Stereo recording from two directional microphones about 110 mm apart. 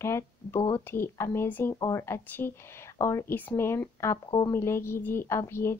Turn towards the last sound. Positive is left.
turn(degrees=25)  # may be behind; listen again after turning